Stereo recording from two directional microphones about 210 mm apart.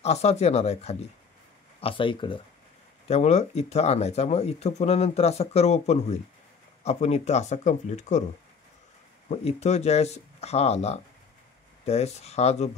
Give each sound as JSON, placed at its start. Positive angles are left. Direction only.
{"t": 0.0, "sound": "speech", "side_deg": 30}
{"t": 9.3, "sound": "speech", "side_deg": 30}